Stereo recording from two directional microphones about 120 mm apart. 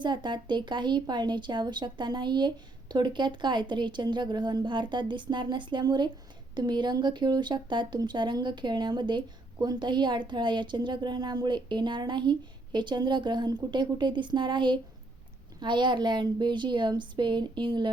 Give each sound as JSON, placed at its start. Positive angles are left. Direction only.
{"t": 0.0, "sound": "a woman's voice", "side_deg": -40}